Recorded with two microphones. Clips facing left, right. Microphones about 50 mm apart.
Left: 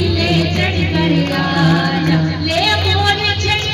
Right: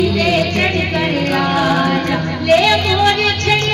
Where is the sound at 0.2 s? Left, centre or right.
Right; by 2.2 s centre.